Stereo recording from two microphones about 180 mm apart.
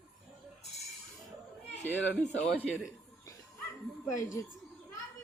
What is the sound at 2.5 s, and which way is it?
Speech, 10° right (ahead or behind).